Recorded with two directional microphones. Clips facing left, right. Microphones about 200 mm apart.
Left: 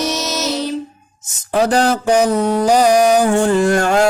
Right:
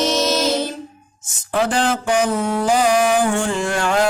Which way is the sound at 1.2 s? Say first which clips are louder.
Left 4 dB; 40° left (ahead or behind).